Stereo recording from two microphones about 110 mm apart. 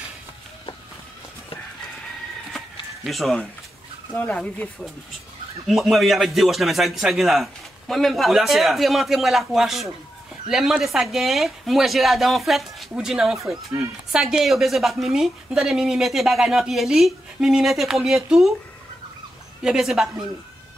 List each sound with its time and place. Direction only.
3.0 s speech: centre (ahead or behind)
4.1 s speech: 15° left (ahead or behind)
5.7 s a woman's voice: centre (ahead or behind)
19.6 s a woman's voice: 5° right (ahead or behind)